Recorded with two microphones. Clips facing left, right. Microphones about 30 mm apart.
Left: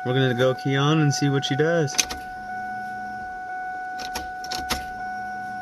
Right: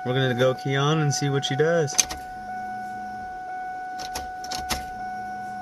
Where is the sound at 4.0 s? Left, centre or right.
Centre.